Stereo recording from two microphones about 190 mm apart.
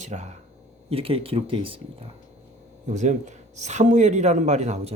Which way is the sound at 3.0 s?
40° right (ahead or behind).